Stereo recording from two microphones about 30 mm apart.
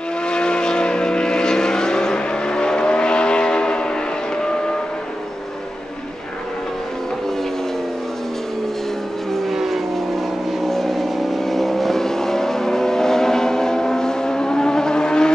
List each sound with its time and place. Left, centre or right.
0.3 s vehicle: left
9.5 s vehicle: centre; by 15.3 s left